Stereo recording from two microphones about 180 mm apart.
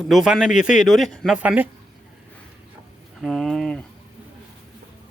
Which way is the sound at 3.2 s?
Centre (ahead or behind).